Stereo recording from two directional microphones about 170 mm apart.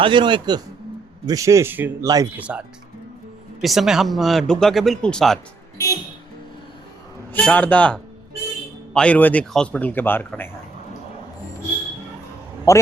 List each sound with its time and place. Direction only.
0.0 s a man's voice: 30° right (ahead or behind)
2.4 s speech: 5° right (ahead or behind)
5.7 s a sound: 20° left (ahead or behind)
7.3 s speech: 10° left (ahead or behind)
12.7 s speech: 15° left (ahead or behind)